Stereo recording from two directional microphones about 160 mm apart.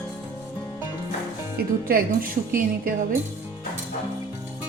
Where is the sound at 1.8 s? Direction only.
65° right (ahead or behind).